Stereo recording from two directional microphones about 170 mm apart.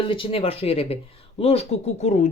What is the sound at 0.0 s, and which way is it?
Speech, 30° left (ahead or behind).